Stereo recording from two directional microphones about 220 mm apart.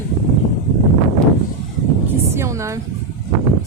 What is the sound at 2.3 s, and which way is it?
Speech, 15° right (ahead or behind).